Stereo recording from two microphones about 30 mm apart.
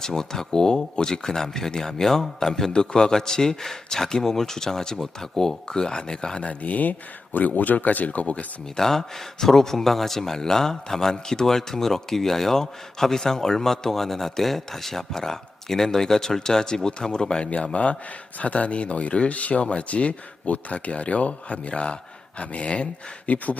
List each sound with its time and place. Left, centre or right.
0.0 s a man's voice: centre
6.4 s speech: left
7.3 s speech: left
8.7 s a man's voice: centre
17.6 s speech: left
19.3 s speech: left
19.5 s speech: left
19.9 s speech: left